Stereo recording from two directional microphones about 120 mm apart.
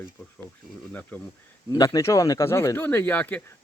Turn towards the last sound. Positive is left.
turn(degrees=15)  # may be behind; listen again after turning